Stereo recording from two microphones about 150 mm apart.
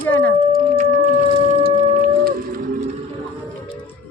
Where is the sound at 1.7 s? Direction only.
60° right (ahead or behind).